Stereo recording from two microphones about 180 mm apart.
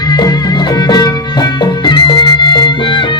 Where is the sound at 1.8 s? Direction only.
25° left (ahead or behind).